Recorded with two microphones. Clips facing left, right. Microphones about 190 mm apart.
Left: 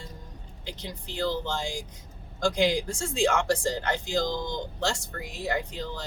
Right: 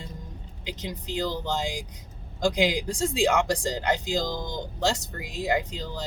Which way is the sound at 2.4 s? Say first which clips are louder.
Even; 15° right (ahead or behind).